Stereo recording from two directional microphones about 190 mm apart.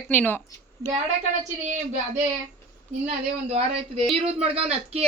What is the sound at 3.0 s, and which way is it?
Speech, 35° right (ahead or behind).